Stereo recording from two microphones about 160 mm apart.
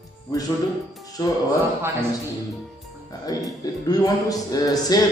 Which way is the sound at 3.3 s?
25° left (ahead or behind).